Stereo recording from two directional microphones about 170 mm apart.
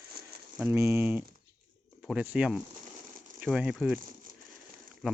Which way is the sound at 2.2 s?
5° right (ahead or behind).